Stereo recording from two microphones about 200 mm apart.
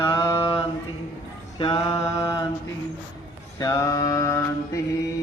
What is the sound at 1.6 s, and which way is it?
Mantra, 25° left (ahead or behind).